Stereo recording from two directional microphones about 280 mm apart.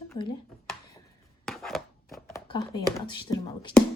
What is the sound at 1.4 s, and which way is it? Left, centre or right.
Chopping, centre.